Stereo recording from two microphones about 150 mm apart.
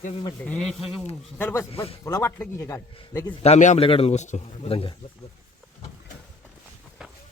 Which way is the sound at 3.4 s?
50° left (ahead or behind).